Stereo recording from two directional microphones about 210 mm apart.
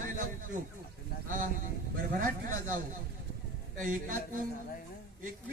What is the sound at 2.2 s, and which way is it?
Speech, 40° right (ahead or behind).